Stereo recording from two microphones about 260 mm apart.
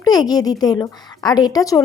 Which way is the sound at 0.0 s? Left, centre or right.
Centre.